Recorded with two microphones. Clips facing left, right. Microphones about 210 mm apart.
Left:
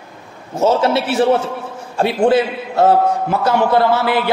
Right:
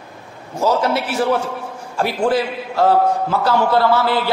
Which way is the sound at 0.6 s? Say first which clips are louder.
Left 3 dB; 25° left (ahead or behind).